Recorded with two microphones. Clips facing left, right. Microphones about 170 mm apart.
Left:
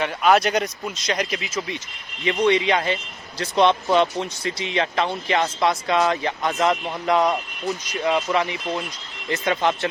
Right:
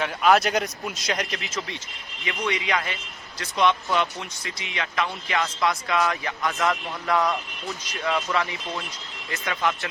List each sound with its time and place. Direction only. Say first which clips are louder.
0.0 s speech: left 2 dB; centre (ahead or behind)
2.2 s speech: left 9 dB; 30° left (ahead or behind)